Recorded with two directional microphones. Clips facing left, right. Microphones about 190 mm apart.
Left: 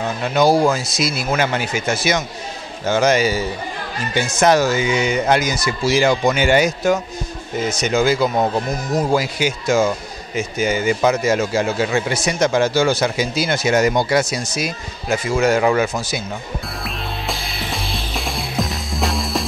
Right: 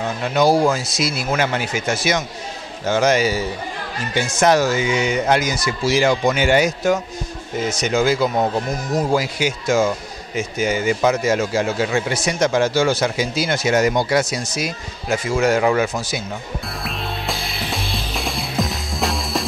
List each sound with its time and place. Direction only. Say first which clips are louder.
0.0 s speech: left 1 dB; 20° left (ahead or behind)
8.4 s speech: left 1 dB; 30° left (ahead or behind)
9.2 s speech: left 1 dB; 20° left (ahead or behind)
16.8 s music: right 2 dB; centre (ahead or behind)